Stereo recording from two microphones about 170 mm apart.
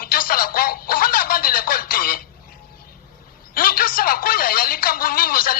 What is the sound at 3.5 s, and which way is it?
Speech, 55° left (ahead or behind).